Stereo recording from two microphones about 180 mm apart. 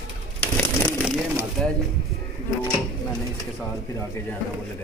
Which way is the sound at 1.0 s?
5° right (ahead or behind).